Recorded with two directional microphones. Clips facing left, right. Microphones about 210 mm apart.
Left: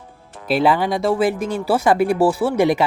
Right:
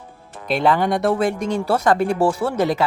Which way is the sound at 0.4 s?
5° left (ahead or behind).